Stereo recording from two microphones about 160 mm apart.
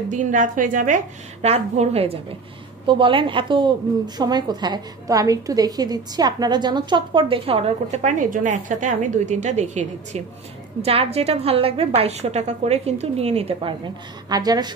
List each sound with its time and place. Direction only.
0.1 s a woman's voice: 55° right (ahead or behind); by 14.7 s 25° right (ahead or behind)